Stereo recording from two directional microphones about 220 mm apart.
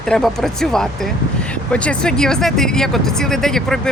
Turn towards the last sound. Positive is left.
turn(degrees=0)  # may be behind; listen again after turning